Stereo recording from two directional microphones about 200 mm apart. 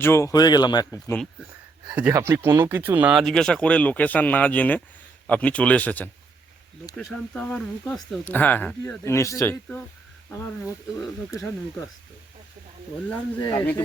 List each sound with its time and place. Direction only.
0.0 s speech: 15° left (ahead or behind)
1.9 s speech: 10° right (ahead or behind); by 11.5 s 15° left (ahead or behind)
13.4 s speech: 20° left (ahead or behind)